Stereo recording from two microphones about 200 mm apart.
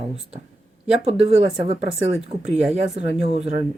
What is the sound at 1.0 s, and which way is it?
Speech, 30° right (ahead or behind).